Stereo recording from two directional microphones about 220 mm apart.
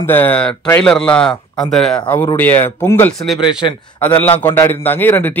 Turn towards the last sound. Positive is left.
turn(degrees=10)  # may be behind; listen again after turning